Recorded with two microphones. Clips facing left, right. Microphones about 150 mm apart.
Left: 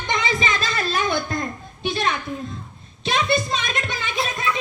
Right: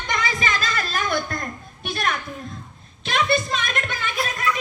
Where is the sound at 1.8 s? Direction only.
20° left (ahead or behind).